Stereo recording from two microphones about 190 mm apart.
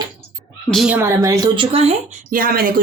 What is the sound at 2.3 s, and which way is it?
Speech, 50° right (ahead or behind).